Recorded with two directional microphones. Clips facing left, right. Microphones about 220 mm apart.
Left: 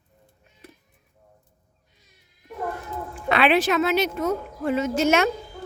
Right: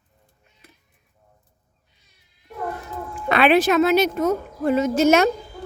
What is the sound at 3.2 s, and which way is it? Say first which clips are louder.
A child's voice: right 3 dB; 45° right (ahead or behind).